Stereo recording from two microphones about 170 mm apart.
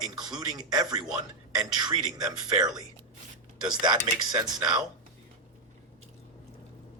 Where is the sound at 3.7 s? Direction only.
25° right (ahead or behind).